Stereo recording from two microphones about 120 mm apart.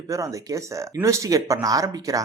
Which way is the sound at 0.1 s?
25° right (ahead or behind).